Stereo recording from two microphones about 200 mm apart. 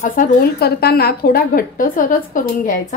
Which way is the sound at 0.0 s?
45° left (ahead or behind).